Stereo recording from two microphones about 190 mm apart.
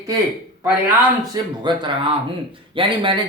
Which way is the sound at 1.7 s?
25° right (ahead or behind).